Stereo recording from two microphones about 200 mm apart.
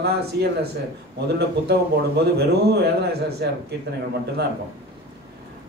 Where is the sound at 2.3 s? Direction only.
55° right (ahead or behind).